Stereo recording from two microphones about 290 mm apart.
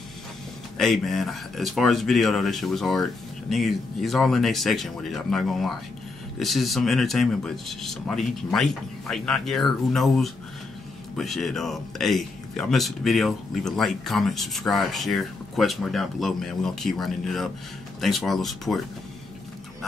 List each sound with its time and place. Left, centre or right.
0.7 s speech: centre